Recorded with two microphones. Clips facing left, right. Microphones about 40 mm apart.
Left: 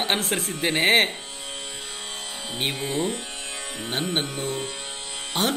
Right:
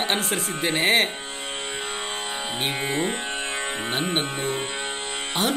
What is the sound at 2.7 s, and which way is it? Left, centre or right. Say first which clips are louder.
Speech: right 2 dB; right.